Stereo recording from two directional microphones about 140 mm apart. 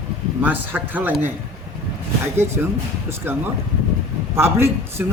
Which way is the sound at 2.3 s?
15° right (ahead or behind).